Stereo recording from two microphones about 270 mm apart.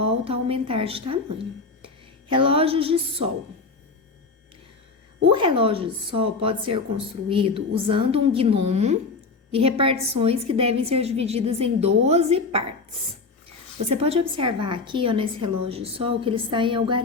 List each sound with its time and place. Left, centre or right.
0.0 s a woman's voice: right
2.3 s a woman's voice: centre
5.3 s a woman's voice: centre